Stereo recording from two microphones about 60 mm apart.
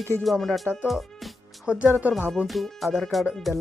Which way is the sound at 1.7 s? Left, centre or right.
Right.